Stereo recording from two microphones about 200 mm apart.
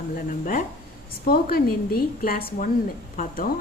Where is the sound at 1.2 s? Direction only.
50° left (ahead or behind).